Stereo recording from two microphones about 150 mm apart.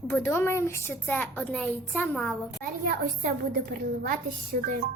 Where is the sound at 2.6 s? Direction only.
65° right (ahead or behind).